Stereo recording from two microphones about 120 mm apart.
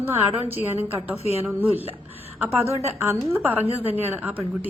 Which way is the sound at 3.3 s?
15° right (ahead or behind).